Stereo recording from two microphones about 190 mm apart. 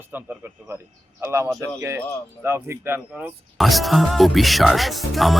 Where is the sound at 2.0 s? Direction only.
5° left (ahead or behind).